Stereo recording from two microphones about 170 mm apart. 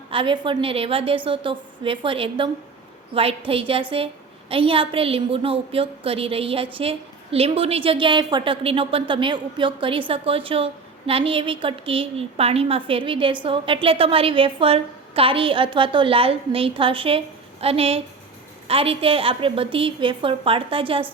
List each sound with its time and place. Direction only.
0.1 s a woman's voice: 30° right (ahead or behind)